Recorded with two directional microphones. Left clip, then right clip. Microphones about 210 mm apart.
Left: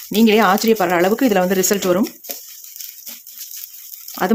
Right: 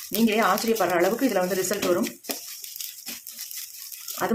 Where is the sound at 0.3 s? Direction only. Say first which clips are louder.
Left 8 dB; 50° left (ahead or behind).